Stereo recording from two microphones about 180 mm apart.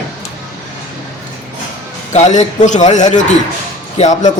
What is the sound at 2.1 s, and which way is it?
A man's voice, 40° left (ahead or behind).